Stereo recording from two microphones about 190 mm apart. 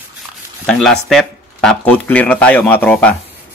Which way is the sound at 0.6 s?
5° left (ahead or behind).